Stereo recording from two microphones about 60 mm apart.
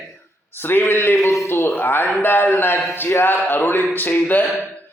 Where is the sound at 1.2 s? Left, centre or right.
Left.